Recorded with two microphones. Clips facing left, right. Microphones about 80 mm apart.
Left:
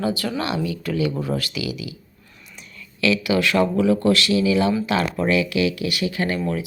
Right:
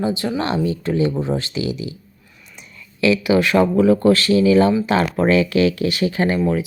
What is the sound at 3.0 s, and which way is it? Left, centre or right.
Speech, right.